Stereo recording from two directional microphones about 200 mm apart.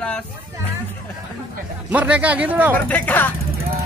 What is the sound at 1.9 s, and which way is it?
Speech, 5° right (ahead or behind).